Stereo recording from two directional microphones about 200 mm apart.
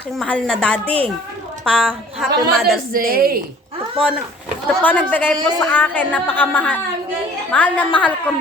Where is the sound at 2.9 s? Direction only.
45° right (ahead or behind).